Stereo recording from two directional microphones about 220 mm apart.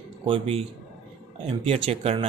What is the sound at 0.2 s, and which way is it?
Speech, 25° right (ahead or behind).